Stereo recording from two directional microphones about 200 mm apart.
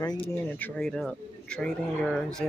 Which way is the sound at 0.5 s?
5° left (ahead or behind).